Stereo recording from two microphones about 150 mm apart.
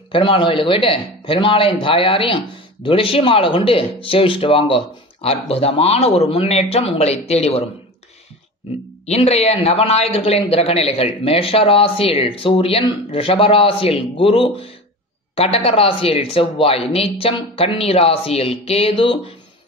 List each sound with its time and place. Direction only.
0.1 s a man's voice: 35° left (ahead or behind)
9.0 s a man's voice: 45° left (ahead or behind)